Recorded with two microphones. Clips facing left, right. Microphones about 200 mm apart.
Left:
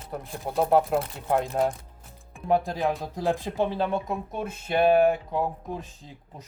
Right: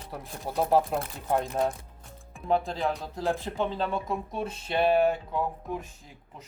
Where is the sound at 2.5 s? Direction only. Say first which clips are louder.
Left 3 dB; 15° left (ahead or behind).